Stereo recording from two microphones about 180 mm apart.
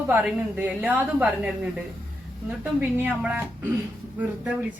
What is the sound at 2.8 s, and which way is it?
A woman's voice, 10° right (ahead or behind).